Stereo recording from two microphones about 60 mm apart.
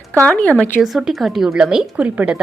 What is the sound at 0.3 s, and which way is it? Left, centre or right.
Speech, left.